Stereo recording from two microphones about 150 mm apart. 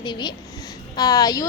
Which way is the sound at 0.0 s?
30° left (ahead or behind).